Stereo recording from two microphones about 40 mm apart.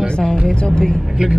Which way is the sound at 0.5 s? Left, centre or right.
Centre.